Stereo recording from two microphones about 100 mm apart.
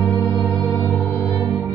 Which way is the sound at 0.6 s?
15° left (ahead or behind).